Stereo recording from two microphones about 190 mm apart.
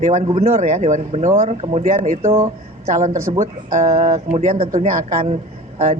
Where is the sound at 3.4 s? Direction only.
35° right (ahead or behind).